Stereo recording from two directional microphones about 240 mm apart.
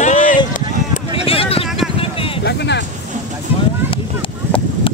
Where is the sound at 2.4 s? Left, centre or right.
Left.